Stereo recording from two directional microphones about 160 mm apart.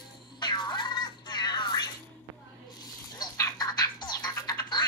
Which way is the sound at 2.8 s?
25° left (ahead or behind).